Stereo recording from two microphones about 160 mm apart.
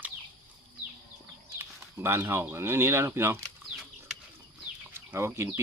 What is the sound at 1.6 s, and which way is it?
Speech, 15° right (ahead or behind).